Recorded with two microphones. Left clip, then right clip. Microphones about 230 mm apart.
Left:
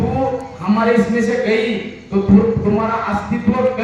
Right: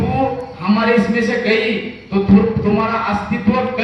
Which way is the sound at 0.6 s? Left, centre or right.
Right.